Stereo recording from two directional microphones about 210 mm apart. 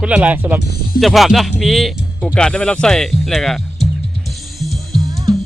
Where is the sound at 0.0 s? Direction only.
5° right (ahead or behind).